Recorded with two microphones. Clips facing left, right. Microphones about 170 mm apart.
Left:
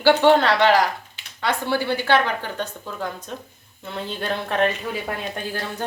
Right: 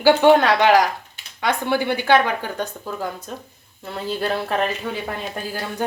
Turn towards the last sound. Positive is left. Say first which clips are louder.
# right 2 dB
turn(degrees=-5)  # may be behind; listen again after turning